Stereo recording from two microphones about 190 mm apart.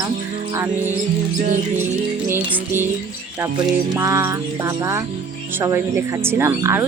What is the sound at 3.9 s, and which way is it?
Speech, 15° right (ahead or behind).